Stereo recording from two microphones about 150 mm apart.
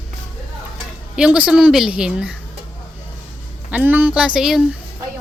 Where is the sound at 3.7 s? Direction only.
10° right (ahead or behind).